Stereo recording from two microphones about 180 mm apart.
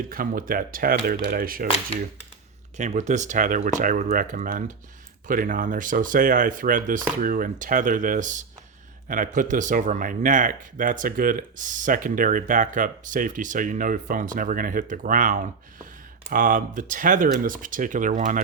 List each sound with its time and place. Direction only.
0.1 s speech: 50° right (ahead or behind)
2.7 s speech: 40° right (ahead or behind)